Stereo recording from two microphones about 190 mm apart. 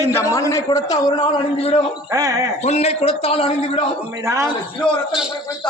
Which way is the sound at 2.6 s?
35° left (ahead or behind).